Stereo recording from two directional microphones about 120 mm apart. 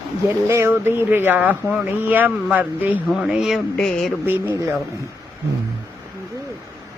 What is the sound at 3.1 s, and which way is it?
Speech, 5° right (ahead or behind).